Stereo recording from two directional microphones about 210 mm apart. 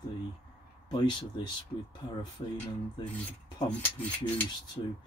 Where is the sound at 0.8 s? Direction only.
20° left (ahead or behind).